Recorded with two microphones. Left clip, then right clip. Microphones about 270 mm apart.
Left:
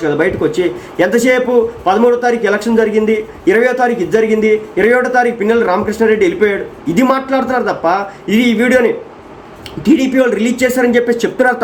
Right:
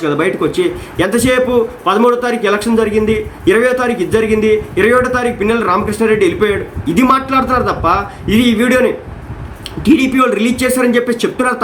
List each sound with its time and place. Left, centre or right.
0.2 s a man's voice: centre